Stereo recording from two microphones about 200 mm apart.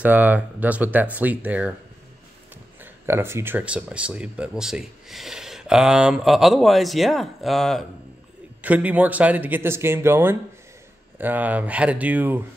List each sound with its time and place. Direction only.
0.0 s speech: 10° right (ahead or behind)
2.8 s speech: 10° right (ahead or behind)